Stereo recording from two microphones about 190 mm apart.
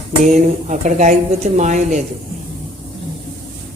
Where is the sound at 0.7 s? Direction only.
40° right (ahead or behind).